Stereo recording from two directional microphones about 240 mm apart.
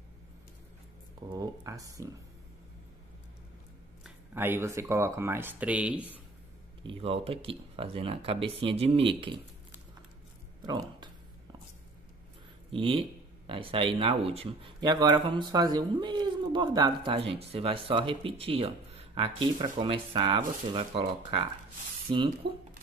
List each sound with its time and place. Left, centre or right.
1.3 s speech: centre
4.0 s speech: centre
6.8 s speech: right
10.6 s a sound: centre
12.7 s speech: right